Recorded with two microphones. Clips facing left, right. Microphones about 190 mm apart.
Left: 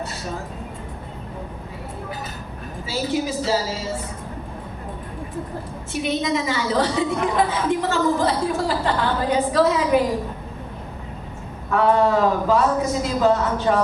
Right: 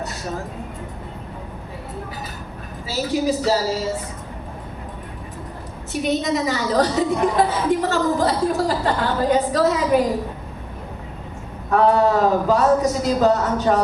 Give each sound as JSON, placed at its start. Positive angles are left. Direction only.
{"t": 2.9, "sound": "a man's voice", "side_deg": -40}
{"t": 5.9, "sound": "a woman's voice", "side_deg": -40}
{"t": 11.7, "sound": "a man's voice", "side_deg": -40}